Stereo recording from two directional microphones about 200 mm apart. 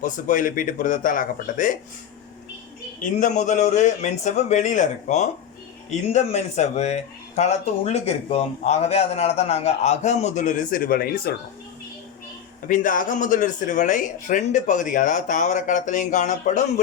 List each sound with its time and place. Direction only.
0.0 s speech: 40° left (ahead or behind)
3.0 s speech: 40° left (ahead or behind)
12.6 s speech: 40° left (ahead or behind)